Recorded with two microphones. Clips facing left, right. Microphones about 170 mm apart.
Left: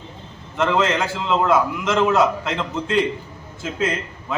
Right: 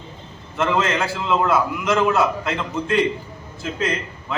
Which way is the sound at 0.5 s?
15° left (ahead or behind).